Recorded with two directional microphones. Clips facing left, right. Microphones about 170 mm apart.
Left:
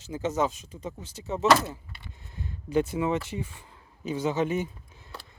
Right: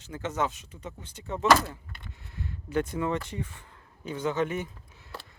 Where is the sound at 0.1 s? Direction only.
10° left (ahead or behind).